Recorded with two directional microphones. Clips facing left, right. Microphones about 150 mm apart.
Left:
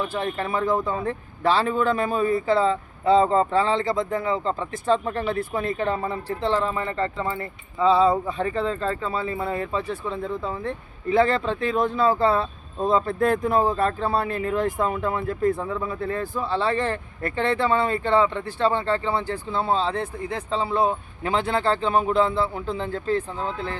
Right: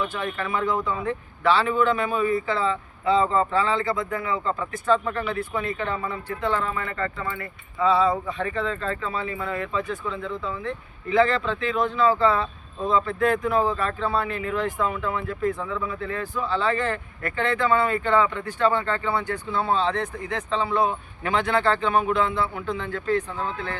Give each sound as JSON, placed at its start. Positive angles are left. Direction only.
{"t": 0.1, "sound": "a man's voice", "side_deg": 35}